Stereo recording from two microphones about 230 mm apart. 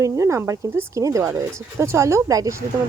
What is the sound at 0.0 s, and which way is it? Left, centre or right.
Speech, centre.